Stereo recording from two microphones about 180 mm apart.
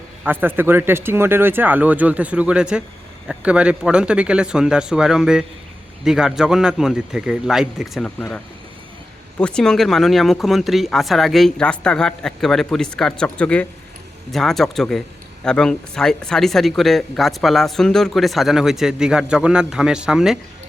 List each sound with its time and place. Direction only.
0.3 s speech: 10° right (ahead or behind)
9.4 s speech: 5° left (ahead or behind)